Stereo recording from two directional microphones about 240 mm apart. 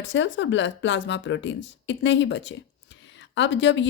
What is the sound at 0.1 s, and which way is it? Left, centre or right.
Speech, left.